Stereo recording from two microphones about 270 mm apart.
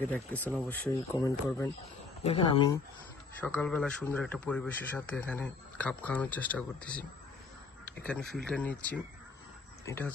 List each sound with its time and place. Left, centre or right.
0.0 s speech: centre
8.0 s speech: centre